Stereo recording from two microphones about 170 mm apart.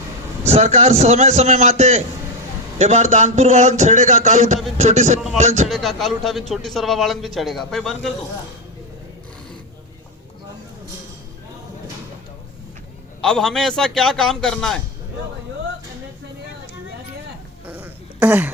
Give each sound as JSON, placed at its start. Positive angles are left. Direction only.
{"t": 0.4, "sound": "a man's voice", "side_deg": -40}
{"t": 5.6, "sound": "speech", "side_deg": 0}
{"t": 13.2, "sound": "speech", "side_deg": 5}
{"t": 17.7, "sound": "a sound", "side_deg": -10}